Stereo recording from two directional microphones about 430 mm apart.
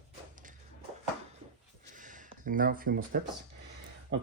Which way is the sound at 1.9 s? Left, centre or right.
Centre.